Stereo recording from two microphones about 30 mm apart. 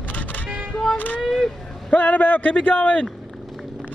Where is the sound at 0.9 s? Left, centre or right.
Left.